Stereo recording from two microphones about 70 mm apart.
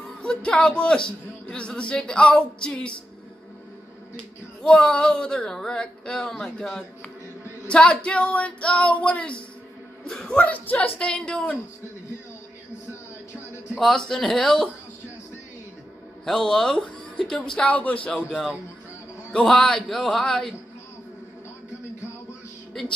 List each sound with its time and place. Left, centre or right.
0.2 s a man's voice: centre
4.6 s a man's voice: centre
13.7 s a man's voice: centre
16.3 s a man's voice: centre
18.1 s a man's voice: centre
22.8 s a man's voice: centre